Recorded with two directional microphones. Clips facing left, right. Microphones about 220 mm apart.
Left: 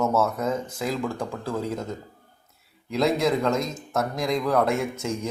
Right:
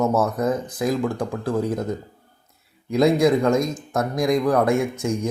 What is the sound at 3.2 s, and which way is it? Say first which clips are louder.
A man's voice: right 5 dB; 15° right (ahead or behind).